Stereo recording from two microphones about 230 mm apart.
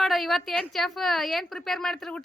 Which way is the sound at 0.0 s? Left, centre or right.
Centre.